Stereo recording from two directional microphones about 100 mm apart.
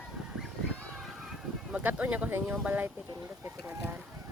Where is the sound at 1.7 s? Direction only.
15° right (ahead or behind).